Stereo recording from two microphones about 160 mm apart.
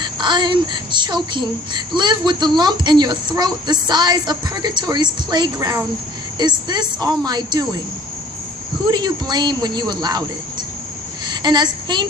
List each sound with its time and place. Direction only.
0.0 s speech: 30° right (ahead or behind)
8.9 s speech: 25° right (ahead or behind)
11.3 s a child's voice: 25° right (ahead or behind)